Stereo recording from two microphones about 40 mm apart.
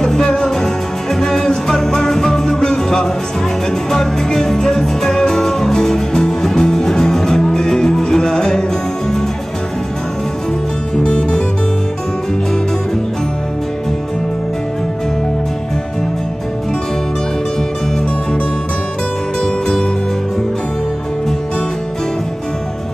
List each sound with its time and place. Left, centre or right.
0.0 s music: centre
11.1 s music: centre